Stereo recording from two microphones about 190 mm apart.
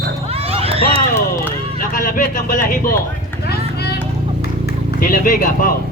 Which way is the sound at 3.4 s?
60° left (ahead or behind).